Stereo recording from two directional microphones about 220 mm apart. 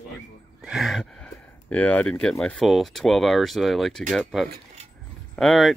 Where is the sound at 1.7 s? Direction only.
5° left (ahead or behind).